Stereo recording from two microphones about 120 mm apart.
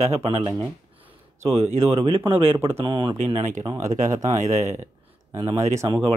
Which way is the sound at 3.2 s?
70° right (ahead or behind).